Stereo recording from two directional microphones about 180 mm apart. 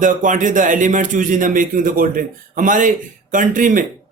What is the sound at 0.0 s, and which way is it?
A man's voice, 45° right (ahead or behind).